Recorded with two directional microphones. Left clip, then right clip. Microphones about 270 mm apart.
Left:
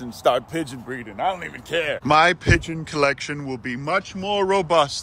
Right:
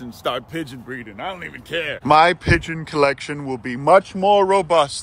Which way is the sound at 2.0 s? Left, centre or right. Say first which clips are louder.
Right 3 dB; centre.